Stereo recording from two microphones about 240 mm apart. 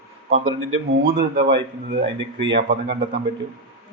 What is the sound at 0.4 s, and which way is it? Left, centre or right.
A man's voice, right.